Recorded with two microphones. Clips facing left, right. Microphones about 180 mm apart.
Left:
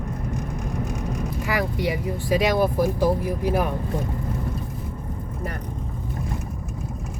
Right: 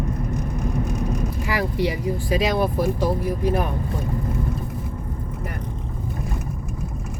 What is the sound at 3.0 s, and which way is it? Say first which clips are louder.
Speech: left 1 dB; 10° left (ahead or behind).